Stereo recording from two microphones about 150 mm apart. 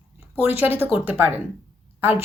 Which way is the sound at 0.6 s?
15° right (ahead or behind).